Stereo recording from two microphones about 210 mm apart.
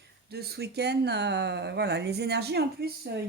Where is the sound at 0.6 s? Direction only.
50° right (ahead or behind).